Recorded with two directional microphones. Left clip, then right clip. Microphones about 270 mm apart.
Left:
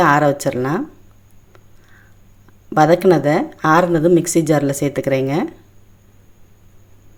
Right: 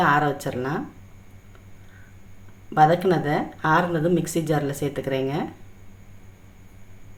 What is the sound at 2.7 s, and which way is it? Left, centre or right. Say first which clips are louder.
A woman's voice: left 6 dB; left.